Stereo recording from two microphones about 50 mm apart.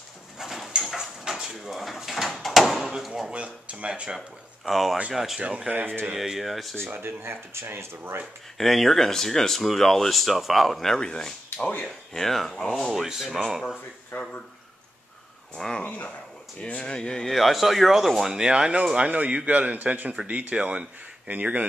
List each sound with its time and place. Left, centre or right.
0.4 s clip-clop: centre
1.3 s door: centre
3.3 s speech: right
4.6 s speech: centre
6.9 s speech: right
8.5 s speech: centre
12.8 s speech: centre
14.1 s speech: left
15.5 s speech: centre
15.8 s speech: left
16.8 s speech: centre
18.2 s speech: centre